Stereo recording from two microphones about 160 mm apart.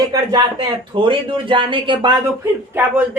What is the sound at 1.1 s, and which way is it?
Speech, 30° right (ahead or behind).